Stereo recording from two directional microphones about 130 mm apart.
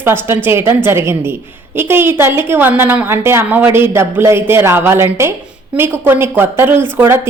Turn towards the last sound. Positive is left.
turn(degrees=-20)  # may be behind; listen again after turning